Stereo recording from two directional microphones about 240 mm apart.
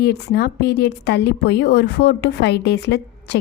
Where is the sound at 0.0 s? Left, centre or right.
Left.